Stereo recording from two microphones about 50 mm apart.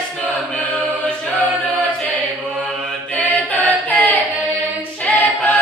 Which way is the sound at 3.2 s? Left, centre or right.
Left.